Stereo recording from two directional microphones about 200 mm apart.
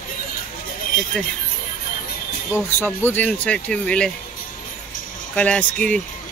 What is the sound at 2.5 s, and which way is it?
Speech, 10° left (ahead or behind).